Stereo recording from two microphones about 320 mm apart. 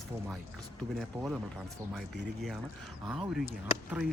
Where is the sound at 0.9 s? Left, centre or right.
Centre.